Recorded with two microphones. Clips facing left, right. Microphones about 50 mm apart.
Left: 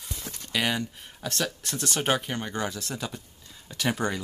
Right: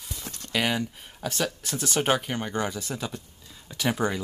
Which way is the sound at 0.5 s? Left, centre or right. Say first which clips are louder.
Right 1 dB; centre.